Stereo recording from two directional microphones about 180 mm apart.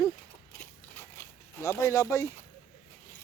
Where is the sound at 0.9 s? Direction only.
15° left (ahead or behind).